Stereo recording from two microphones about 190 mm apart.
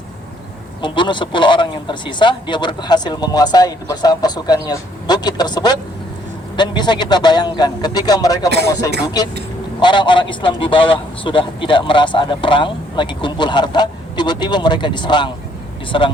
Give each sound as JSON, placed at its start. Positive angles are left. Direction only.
{"t": 0.8, "sound": "a man's voice", "side_deg": 25}
{"t": 8.4, "sound": "speech", "side_deg": -60}
{"t": 9.8, "sound": "a man's voice", "side_deg": 25}